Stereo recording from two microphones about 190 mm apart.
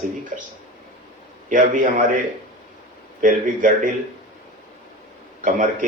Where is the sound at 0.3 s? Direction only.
45° right (ahead or behind).